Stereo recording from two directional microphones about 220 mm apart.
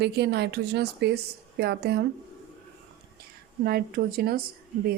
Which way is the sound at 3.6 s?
45° right (ahead or behind).